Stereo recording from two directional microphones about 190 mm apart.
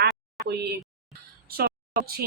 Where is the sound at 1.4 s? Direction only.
55° right (ahead or behind).